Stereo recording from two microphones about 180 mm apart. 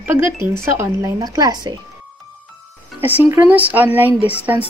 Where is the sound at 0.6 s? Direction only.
15° right (ahead or behind).